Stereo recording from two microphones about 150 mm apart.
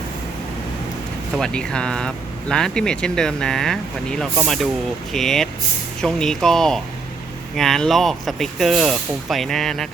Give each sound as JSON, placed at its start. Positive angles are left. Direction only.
{"t": 1.4, "sound": "speech", "side_deg": 5}